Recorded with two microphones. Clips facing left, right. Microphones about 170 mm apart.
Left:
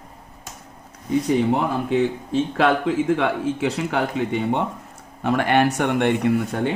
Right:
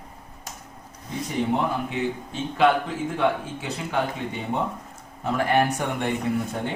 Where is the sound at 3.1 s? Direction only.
90° left; by 4.6 s 70° left (ahead or behind).